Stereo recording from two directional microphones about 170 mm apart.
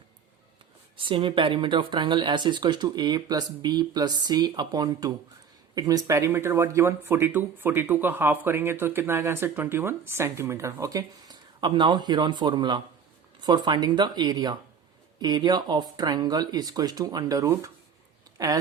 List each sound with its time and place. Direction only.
0.9 s speech: 30° right (ahead or behind)